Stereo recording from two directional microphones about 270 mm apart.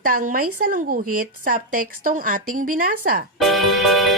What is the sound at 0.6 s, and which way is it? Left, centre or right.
Speech, right.